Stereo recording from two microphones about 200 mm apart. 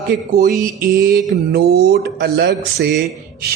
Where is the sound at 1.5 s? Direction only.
50° right (ahead or behind).